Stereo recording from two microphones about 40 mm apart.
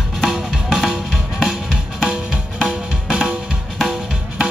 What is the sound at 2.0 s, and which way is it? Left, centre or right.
Drum, centre.